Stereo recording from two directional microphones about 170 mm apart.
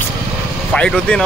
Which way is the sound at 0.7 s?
5° left (ahead or behind).